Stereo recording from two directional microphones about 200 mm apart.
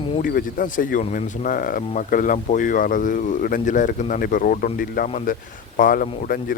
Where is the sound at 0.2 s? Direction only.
45° left (ahead or behind).